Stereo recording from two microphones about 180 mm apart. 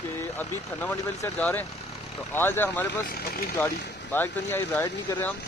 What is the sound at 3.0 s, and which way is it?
Speech, 55° left (ahead or behind).